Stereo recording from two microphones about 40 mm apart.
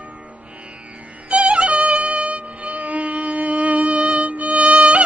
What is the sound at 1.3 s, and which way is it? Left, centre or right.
Music, right.